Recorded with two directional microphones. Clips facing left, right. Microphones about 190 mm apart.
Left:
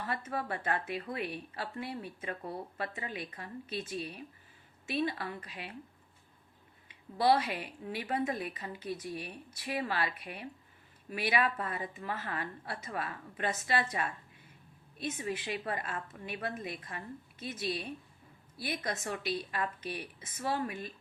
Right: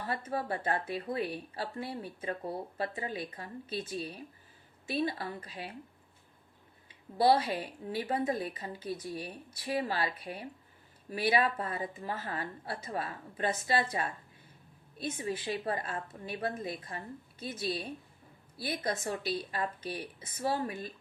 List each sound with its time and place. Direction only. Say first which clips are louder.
0.0 s speech: right 2 dB; 30° right (ahead or behind)
7.2 s speech: right 2 dB; 30° right (ahead or behind)